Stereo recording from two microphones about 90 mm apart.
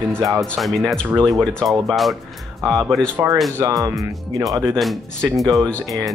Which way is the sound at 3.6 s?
40° right (ahead or behind).